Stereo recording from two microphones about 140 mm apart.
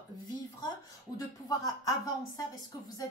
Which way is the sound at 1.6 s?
25° left (ahead or behind).